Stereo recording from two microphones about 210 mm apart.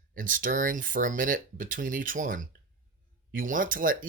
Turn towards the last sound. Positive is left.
turn(degrees=-40)  # may be behind; listen again after turning